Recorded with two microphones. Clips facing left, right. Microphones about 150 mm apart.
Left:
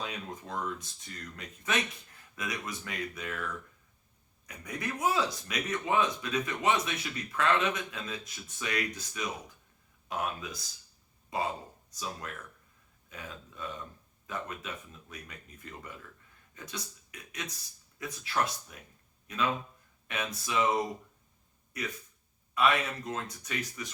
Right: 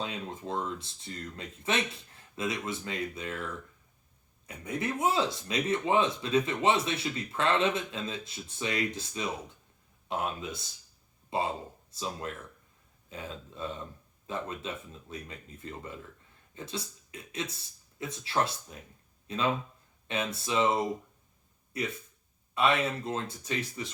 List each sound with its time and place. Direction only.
0.0 s speech: 25° right (ahead or behind)
21.7 s speech: 25° right (ahead or behind)